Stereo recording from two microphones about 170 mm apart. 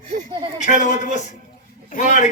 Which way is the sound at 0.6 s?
45° left (ahead or behind).